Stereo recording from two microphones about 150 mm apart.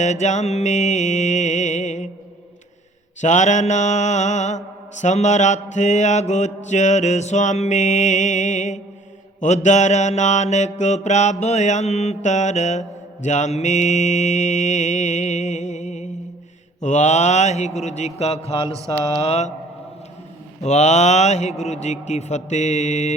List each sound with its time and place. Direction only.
0.0 s mantra: 50° left (ahead or behind)
3.2 s mantra: 55° left (ahead or behind)
20.6 s mantra: 50° left (ahead or behind)